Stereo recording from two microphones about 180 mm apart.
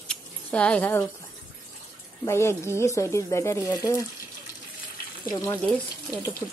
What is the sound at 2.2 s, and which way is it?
Speech, 15° left (ahead or behind).